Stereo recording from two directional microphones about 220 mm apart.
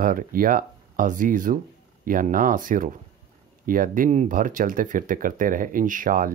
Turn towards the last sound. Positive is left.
turn(degrees=-40)  # may be behind; listen again after turning